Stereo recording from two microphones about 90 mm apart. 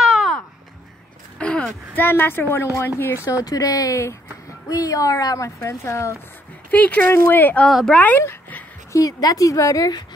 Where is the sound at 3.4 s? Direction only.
40° left (ahead or behind).